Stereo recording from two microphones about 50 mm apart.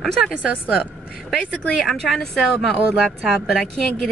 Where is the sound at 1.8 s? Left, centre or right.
Centre.